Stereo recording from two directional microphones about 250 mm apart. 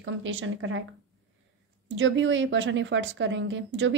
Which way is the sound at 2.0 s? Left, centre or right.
Right.